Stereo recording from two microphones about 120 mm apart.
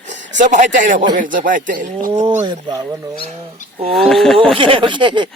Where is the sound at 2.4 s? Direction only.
40° right (ahead or behind).